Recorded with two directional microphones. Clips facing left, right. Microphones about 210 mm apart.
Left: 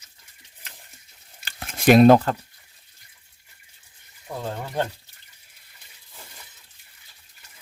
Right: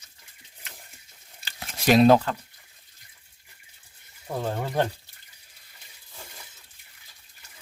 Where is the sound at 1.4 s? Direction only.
50° left (ahead or behind).